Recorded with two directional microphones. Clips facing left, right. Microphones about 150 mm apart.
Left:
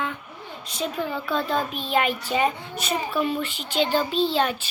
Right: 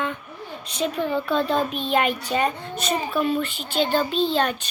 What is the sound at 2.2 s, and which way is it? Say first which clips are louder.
Child singing: even; 5° left (ahead or behind).